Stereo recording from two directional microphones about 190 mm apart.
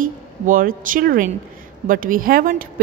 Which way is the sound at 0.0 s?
45° right (ahead or behind).